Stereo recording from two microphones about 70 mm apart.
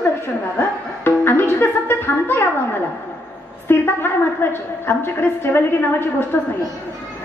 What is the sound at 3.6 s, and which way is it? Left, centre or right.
A woman's voice, left.